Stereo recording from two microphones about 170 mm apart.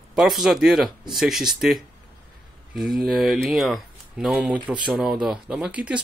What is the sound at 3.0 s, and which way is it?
Speech, centre (ahead or behind).